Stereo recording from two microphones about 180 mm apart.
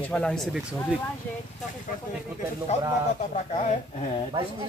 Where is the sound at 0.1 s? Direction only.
5° left (ahead or behind).